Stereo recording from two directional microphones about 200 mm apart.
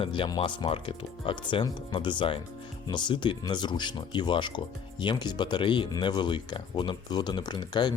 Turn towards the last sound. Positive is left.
turn(degrees=20)  # may be behind; listen again after turning